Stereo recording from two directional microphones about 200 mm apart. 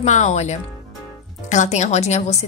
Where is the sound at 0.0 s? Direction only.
35° left (ahead or behind).